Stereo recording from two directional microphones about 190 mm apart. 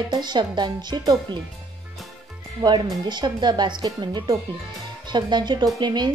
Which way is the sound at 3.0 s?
25° right (ahead or behind).